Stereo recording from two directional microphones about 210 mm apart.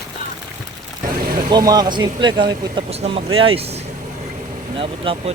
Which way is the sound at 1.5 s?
20° right (ahead or behind).